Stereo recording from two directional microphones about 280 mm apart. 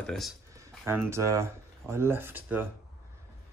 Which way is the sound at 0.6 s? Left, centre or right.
Centre.